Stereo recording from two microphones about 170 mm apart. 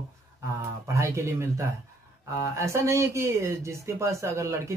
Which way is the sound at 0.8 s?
15° right (ahead or behind).